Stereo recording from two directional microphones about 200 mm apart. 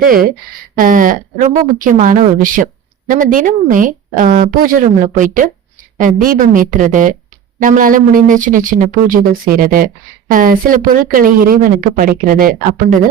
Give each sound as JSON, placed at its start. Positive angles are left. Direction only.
{"t": 0.0, "sound": "speech", "side_deg": -45}